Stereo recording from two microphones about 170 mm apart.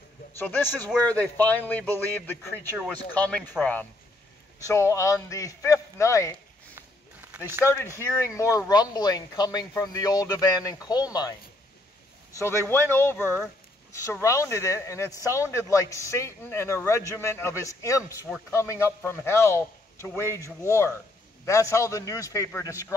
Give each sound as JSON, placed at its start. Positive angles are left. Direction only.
{"t": 0.4, "sound": "a man's voice", "side_deg": 10}
{"t": 4.6, "sound": "a man's voice", "side_deg": 15}
{"t": 7.3, "sound": "speech", "side_deg": -15}
{"t": 7.6, "sound": "a man's voice", "side_deg": 15}
{"t": 12.4, "sound": "a man's voice", "side_deg": 15}
{"t": 14.2, "sound": "a man's voice", "side_deg": 15}